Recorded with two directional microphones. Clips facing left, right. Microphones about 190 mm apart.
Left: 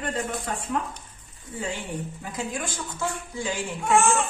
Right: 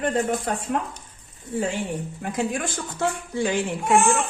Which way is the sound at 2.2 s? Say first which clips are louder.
Right 9 dB; 65° right (ahead or behind).